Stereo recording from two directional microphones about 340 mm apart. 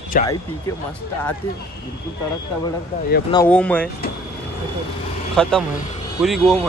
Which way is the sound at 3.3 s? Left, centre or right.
Centre.